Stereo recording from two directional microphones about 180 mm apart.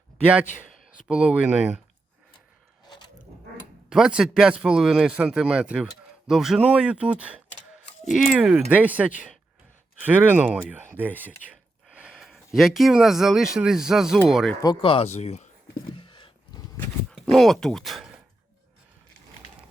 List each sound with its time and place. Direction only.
0.3 s speech: 5° right (ahead or behind)
2.8 s a sound: 25° left (ahead or behind)
3.8 s speech: 5° right (ahead or behind)
14.6 s speech: 25° left (ahead or behind)
15.7 s a sound: 25° left (ahead or behind)
17.2 s speech: centre (ahead or behind)